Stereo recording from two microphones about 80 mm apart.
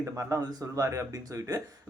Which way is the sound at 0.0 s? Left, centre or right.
Right.